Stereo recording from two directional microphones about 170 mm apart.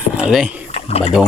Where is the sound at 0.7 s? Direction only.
35° left (ahead or behind).